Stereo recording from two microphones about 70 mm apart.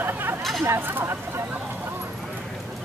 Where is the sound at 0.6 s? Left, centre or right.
Right.